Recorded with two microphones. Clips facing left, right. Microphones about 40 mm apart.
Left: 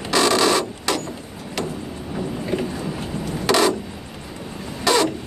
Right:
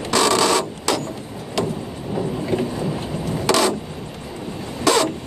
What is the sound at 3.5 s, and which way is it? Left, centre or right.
Mechanisms, centre.